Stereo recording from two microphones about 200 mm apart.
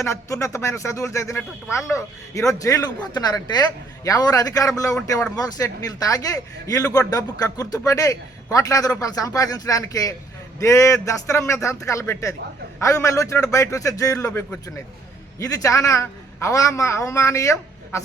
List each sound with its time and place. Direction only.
0.0 s a man's voice: 15° left (ahead or behind)